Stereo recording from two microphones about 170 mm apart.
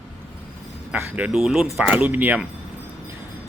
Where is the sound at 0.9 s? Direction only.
10° right (ahead or behind).